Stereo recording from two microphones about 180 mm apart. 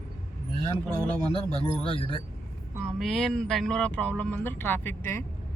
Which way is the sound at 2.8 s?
Centre (ahead or behind).